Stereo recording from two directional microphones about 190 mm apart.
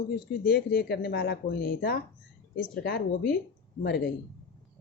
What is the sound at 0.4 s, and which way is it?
Speech, 55° left (ahead or behind).